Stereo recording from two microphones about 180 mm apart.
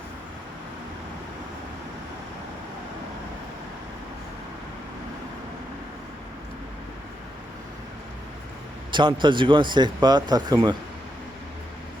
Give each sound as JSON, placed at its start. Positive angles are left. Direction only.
{"t": 8.9, "sound": "speech", "side_deg": -25}